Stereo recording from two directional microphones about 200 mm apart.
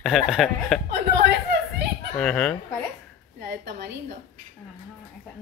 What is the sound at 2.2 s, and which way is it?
Speech, 5° left (ahead or behind).